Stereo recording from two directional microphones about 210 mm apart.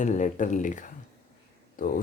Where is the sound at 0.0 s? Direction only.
35° left (ahead or behind).